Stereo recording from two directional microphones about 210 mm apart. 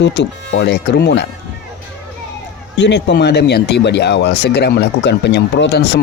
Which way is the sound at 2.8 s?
55° left (ahead or behind).